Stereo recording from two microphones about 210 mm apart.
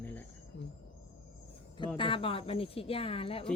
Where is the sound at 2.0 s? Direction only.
25° left (ahead or behind).